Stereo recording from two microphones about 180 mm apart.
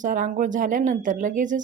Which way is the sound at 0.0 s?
45° right (ahead or behind).